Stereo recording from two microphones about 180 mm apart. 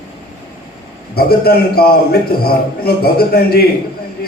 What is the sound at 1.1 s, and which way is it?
A man's voice, 60° left (ahead or behind).